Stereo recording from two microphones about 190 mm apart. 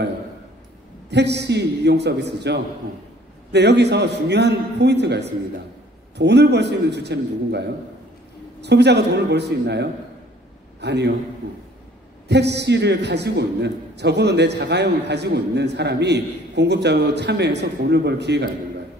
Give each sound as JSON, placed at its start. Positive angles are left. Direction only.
{"t": 1.1, "sound": "a man's voice", "side_deg": -65}
{"t": 12.3, "sound": "a man's voice", "side_deg": -60}